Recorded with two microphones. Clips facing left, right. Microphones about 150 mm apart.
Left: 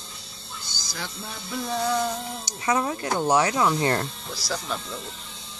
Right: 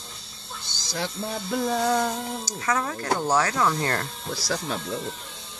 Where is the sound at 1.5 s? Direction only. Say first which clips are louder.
Right 2 dB; 50° right (ahead or behind).